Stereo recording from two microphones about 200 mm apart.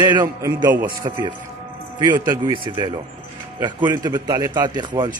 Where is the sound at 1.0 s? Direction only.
20° right (ahead or behind).